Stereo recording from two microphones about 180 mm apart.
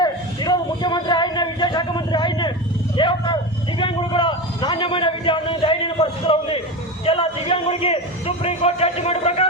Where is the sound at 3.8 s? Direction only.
25° left (ahead or behind).